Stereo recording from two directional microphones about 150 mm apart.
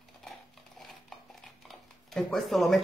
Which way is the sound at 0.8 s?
Centre (ahead or behind).